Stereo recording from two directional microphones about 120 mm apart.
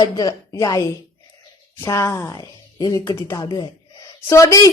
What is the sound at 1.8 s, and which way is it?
A woman's voice, 25° left (ahead or behind).